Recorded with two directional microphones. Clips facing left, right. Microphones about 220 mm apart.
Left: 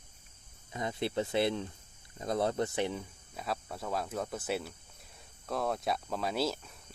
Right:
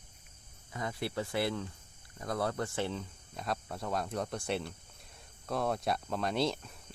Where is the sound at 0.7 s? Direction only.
20° left (ahead or behind).